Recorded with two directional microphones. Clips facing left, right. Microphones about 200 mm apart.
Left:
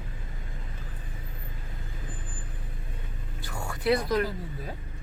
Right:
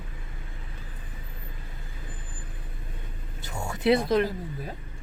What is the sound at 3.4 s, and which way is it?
Speech, 20° right (ahead or behind).